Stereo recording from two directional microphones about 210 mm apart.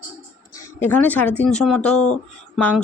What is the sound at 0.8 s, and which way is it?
Speech, 10° left (ahead or behind).